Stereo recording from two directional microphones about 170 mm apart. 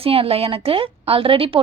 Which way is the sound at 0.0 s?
35° right (ahead or behind).